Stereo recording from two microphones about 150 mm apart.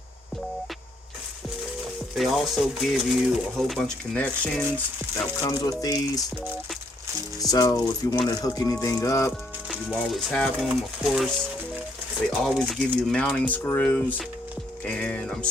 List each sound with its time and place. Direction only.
2.1 s speech: centre (ahead or behind)
5.4 s speech: 25° left (ahead or behind)
7.3 s speech: 25° left (ahead or behind)
9.6 s speech: centre (ahead or behind)
12.3 s speech: centre (ahead or behind)